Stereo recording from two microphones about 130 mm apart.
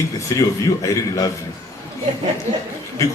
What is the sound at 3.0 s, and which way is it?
Speech, 25° left (ahead or behind).